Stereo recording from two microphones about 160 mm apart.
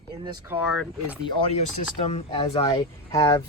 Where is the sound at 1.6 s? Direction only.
40° left (ahead or behind); by 3.4 s 25° left (ahead or behind).